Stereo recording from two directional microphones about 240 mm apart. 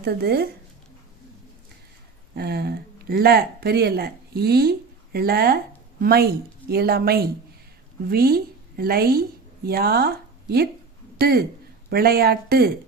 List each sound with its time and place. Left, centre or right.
0.0 s a woman's voice: right
2.3 s a woman's voice: right